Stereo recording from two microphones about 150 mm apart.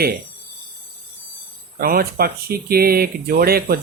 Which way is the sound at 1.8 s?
80° right.